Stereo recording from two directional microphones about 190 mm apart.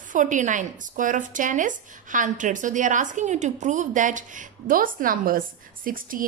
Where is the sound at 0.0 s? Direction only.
40° right (ahead or behind).